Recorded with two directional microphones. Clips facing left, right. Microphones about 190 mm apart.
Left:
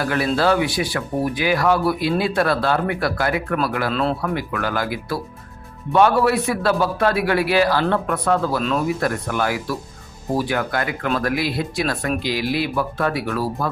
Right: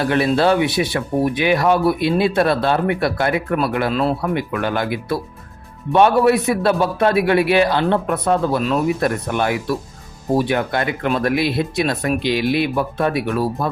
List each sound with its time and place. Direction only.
0.0 s speech: 25° right (ahead or behind)